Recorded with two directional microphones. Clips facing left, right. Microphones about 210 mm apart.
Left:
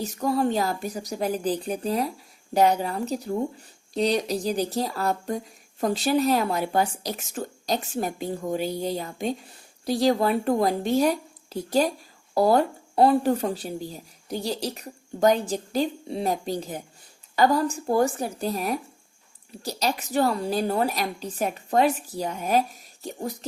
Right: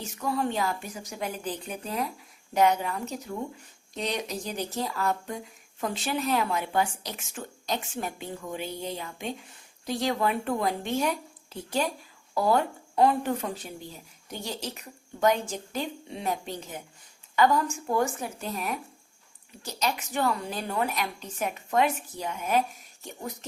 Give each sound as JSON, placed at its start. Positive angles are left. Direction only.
{"t": 0.0, "sound": "speech", "side_deg": 40}